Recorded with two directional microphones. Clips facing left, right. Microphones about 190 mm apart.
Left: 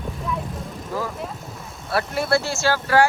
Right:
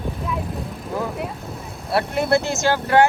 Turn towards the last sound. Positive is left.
turn(degrees=-20)  # may be behind; listen again after turning